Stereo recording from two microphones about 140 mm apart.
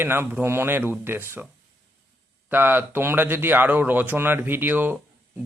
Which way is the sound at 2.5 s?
15° right (ahead or behind).